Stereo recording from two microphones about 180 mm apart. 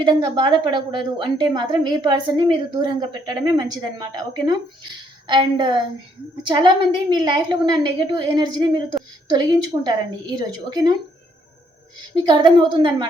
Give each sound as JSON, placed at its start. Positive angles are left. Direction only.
{"t": 0.0, "sound": "a woman's voice", "side_deg": -25}
{"t": 12.1, "sound": "a woman's voice", "side_deg": -25}